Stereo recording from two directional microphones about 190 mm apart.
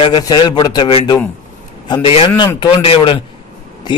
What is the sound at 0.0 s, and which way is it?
A man's voice, 20° left (ahead or behind).